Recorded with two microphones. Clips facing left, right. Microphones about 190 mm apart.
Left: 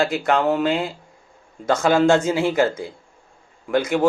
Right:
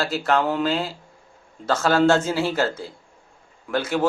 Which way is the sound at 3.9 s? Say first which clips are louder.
Left 3 dB; 20° left (ahead or behind).